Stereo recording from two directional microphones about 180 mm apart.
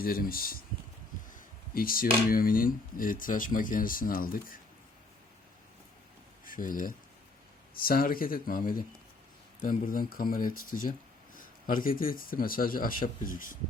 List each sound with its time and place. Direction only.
0.0 s speech: 55° left (ahead or behind)
6.4 s speech: 50° left (ahead or behind)